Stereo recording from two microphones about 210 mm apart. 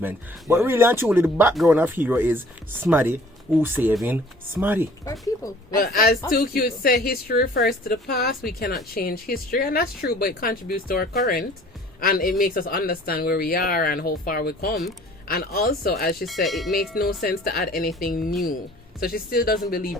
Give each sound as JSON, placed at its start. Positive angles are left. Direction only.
{"t": 0.0, "sound": "speech", "side_deg": -10}
{"t": 5.7, "sound": "speech", "side_deg": 45}
{"t": 16.2, "sound": "speech", "side_deg": 0}
{"t": 17.2, "sound": "speech", "side_deg": 45}